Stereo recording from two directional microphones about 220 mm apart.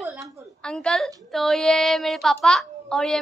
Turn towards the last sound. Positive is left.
turn(degrees=0)  # may be behind; listen again after turning